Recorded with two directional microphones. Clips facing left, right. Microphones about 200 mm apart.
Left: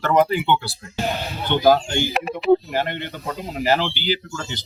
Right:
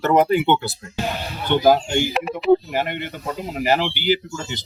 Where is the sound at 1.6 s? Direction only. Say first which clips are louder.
Even; 15° right (ahead or behind).